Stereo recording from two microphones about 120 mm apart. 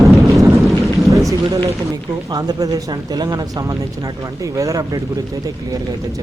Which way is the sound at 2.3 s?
35° right (ahead or behind).